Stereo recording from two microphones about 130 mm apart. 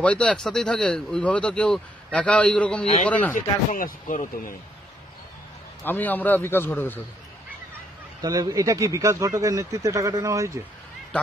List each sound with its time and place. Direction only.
0.0 s speech: 10° left (ahead or behind)
3.3 s speech: 90° left
5.9 s speech: 15° left (ahead or behind)
8.2 s speech: 30° right (ahead or behind)